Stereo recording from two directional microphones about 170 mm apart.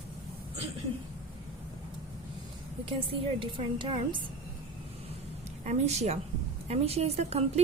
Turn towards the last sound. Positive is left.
turn(degrees=-40)  # may be behind; listen again after turning